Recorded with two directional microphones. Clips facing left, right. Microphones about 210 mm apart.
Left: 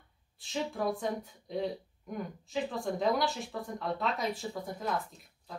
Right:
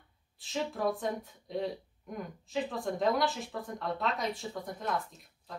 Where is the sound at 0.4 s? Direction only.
Centre (ahead or behind).